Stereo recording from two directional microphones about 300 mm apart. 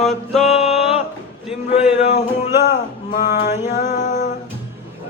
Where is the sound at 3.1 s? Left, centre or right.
Left.